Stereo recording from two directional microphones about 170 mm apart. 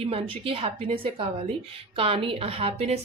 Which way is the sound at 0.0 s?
35° right (ahead or behind).